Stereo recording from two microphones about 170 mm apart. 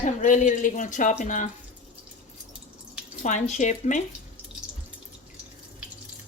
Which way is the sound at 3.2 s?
45° left (ahead or behind).